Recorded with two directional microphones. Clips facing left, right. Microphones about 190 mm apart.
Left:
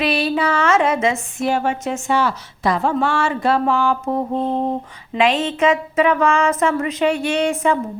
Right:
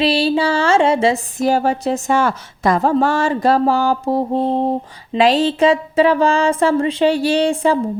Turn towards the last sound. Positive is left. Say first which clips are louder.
# right 3 dB
turn(degrees=-30)  # may be behind; listen again after turning